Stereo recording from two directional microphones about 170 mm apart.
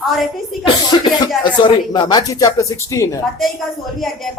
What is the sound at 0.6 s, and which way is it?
Speech, 30° left (ahead or behind).